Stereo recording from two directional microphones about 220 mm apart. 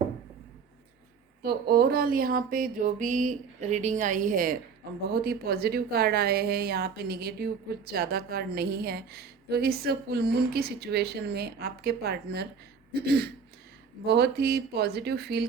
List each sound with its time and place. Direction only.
1.4 s a sound: 45° right (ahead or behind)
5.1 s a woman's voice: 45° right (ahead or behind)
14.0 s a woman's voice: 50° right (ahead or behind)